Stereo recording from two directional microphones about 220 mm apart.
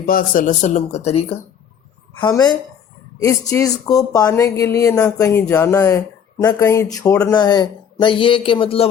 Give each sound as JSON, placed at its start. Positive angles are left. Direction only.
{"t": 0.0, "sound": "speech", "side_deg": 40}
{"t": 2.2, "sound": "speech", "side_deg": 20}